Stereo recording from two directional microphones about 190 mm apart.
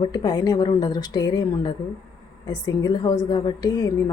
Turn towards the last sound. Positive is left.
turn(degrees=20)  # may be behind; listen again after turning